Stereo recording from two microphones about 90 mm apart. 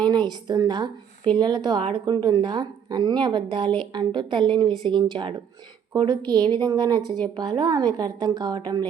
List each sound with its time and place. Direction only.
0.0 s a woman's voice: 55° right (ahead or behind)